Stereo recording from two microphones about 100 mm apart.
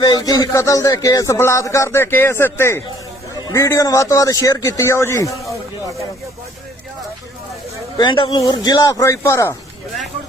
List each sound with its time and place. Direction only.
0.0 s speech: 45° left (ahead or behind)
7.9 s speech: 50° left (ahead or behind); by 9.6 s 25° left (ahead or behind)